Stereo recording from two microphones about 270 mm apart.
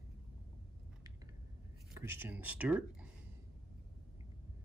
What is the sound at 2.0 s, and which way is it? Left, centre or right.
Speech, centre.